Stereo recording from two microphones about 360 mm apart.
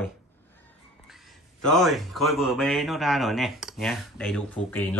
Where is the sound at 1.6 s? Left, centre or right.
Centre.